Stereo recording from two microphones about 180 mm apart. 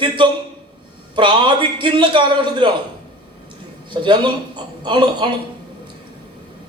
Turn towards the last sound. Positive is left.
turn(degrees=-25)  # may be behind; listen again after turning